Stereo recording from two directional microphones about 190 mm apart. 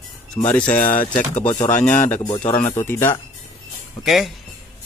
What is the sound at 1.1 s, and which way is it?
Speech, 40° left (ahead or behind).